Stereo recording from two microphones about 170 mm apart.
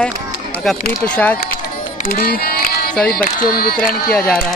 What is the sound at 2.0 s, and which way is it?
Music, 55° left (ahead or behind).